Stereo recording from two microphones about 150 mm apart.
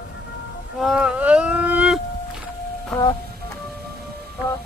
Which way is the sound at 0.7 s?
5° right (ahead or behind).